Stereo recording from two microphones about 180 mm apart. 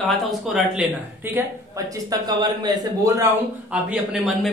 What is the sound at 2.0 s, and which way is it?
Speech, 20° right (ahead or behind).